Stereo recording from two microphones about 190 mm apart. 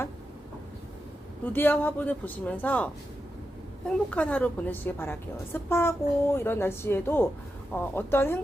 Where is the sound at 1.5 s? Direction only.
10° left (ahead or behind).